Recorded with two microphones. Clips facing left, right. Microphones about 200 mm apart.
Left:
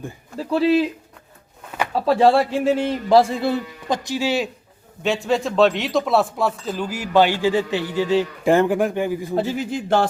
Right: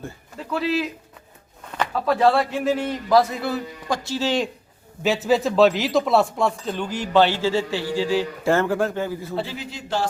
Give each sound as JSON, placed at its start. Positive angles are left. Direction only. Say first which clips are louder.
{"t": 0.3, "sound": "speech", "louder": "left 6 dB", "side_deg": 30}
{"t": 1.9, "sound": "a man's voice", "louder": "left 3 dB", "side_deg": 30}
{"t": 5.0, "sound": "speech", "louder": "right 1 dB", "side_deg": 0}
{"t": 9.3, "sound": "speech", "louder": "left 7 dB", "side_deg": 45}